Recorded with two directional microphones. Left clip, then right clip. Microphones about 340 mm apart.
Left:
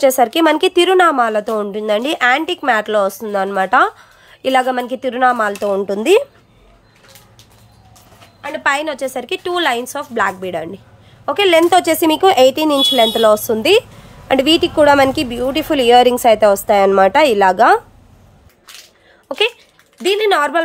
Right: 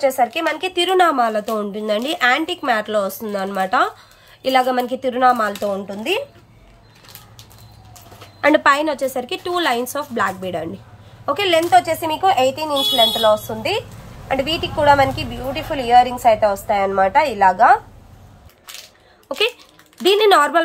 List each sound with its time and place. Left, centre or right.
0.0 s speech: centre
8.5 s a woman's voice: centre
11.7 s a woman's voice: left
19.2 s a sound: centre
20.0 s a woman's voice: centre